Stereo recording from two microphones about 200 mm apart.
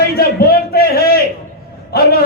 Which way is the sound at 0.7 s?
50° left (ahead or behind).